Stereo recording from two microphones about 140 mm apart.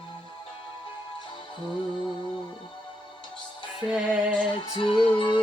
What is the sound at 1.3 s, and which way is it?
Music, 35° left (ahead or behind).